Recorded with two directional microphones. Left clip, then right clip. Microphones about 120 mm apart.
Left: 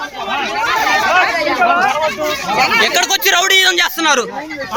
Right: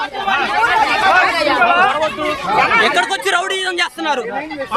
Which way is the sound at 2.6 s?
20° left (ahead or behind).